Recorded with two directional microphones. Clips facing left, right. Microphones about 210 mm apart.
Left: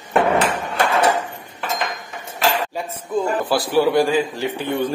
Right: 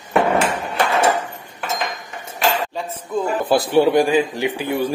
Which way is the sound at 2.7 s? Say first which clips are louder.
Even; 10° left (ahead or behind).